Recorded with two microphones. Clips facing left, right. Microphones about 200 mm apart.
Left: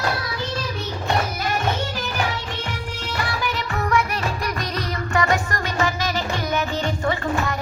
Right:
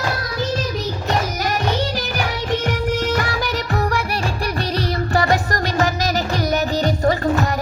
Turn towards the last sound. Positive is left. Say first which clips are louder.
# right 5 dB
turn(degrees=-40)  # may be behind; listen again after turning